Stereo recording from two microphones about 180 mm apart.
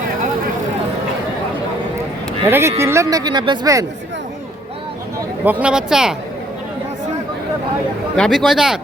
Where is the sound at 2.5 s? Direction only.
15° right (ahead or behind).